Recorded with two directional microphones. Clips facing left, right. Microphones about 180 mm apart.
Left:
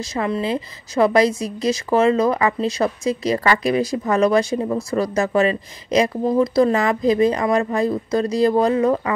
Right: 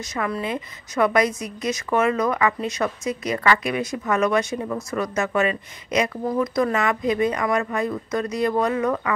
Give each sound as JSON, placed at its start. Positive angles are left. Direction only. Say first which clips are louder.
{"t": 0.1, "sound": "a woman's voice", "louder": "left 4 dB", "side_deg": 25}